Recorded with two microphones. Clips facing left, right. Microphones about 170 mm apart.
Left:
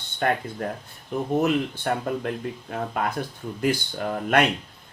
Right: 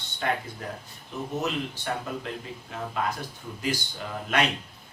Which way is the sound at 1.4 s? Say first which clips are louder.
Left 7 dB; 55° left (ahead or behind).